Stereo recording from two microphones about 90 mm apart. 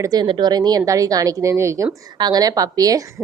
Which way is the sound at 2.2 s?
45° right (ahead or behind).